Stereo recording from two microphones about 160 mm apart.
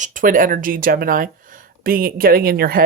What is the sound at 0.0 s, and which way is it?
Speech, 55° right (ahead or behind).